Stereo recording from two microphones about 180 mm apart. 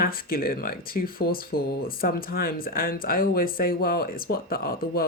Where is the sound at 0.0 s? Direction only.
55° left (ahead or behind).